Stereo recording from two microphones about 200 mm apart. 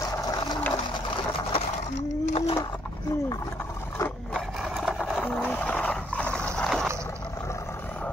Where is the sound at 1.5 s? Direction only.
35° left (ahead or behind).